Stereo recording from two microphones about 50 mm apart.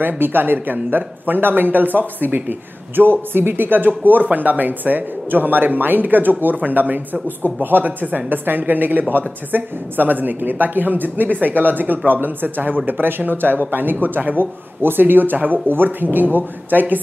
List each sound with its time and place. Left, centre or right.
0.0 s speech: right